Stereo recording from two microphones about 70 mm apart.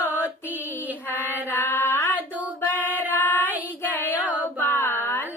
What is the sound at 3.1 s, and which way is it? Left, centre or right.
Music, left.